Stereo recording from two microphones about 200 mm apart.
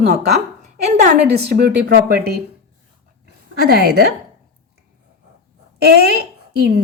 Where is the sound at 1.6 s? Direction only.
50° right (ahead or behind).